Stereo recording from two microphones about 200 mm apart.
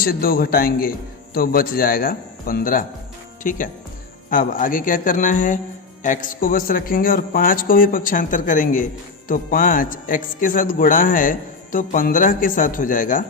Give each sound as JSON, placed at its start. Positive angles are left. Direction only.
{"t": 0.0, "sound": "a man's voice", "side_deg": 45}